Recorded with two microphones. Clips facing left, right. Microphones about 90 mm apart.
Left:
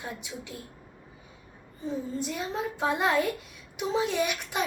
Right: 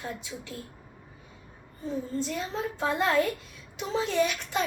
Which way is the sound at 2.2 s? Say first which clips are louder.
Even; 15° left (ahead or behind).